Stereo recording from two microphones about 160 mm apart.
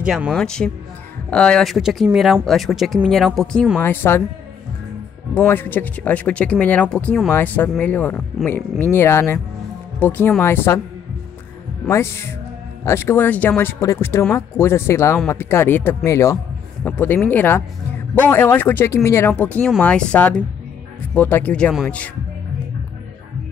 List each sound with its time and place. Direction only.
0.0 s speech: 5° right (ahead or behind)
3.8 s speech: 15° left (ahead or behind)
5.3 s speech: 15° left (ahead or behind)
11.9 s speech: 15° left (ahead or behind)